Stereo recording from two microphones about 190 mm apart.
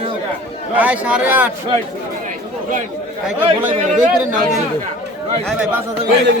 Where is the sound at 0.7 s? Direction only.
10° right (ahead or behind).